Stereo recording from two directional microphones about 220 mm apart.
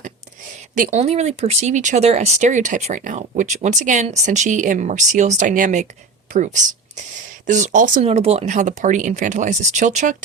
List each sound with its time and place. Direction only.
0.8 s speech: 30° right (ahead or behind)